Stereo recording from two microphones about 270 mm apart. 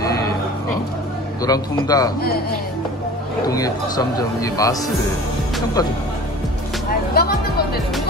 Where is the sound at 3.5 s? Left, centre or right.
Centre.